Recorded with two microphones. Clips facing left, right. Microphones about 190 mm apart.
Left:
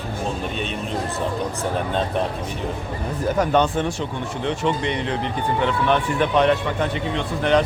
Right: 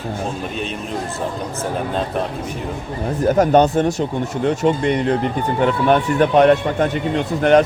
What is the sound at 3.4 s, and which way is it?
Speech, 40° right (ahead or behind).